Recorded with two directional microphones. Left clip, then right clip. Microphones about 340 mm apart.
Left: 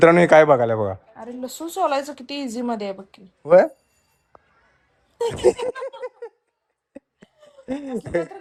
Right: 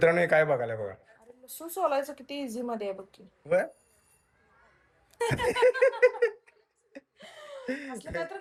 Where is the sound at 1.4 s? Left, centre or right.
Left.